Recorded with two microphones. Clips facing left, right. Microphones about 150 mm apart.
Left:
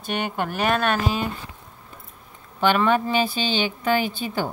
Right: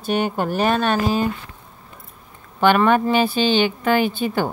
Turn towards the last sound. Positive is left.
turn(degrees=-55)  # may be behind; listen again after turning